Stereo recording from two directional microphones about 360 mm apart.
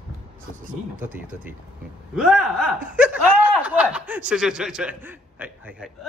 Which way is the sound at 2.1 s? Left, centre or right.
Centre.